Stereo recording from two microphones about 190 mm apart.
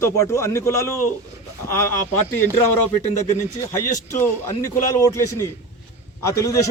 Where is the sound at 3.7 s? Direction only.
15° left (ahead or behind).